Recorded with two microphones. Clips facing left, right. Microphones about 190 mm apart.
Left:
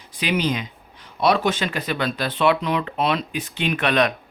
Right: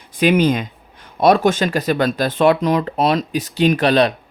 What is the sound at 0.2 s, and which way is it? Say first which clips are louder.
Speech: right 8 dB; 50° right (ahead or behind).